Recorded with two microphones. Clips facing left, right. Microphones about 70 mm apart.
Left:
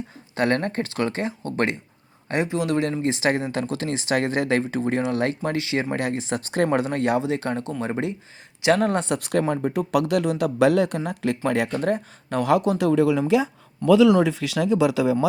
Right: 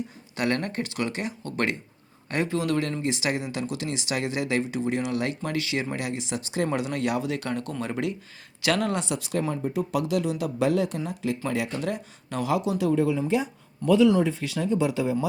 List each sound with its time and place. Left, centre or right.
0.3 s a man's voice: left
3.0 s speech: left
11.7 s speech: left
12.9 s speech: left